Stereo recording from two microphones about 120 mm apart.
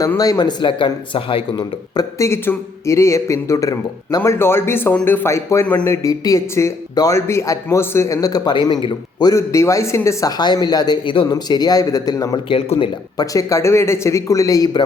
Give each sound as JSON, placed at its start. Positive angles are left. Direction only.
{"t": 0.2, "sound": "a man's voice", "side_deg": 35}
{"t": 2.0, "sound": "a man's voice", "side_deg": 25}
{"t": 12.5, "sound": "speech", "side_deg": 50}
{"t": 13.1, "sound": "a man's voice", "side_deg": 30}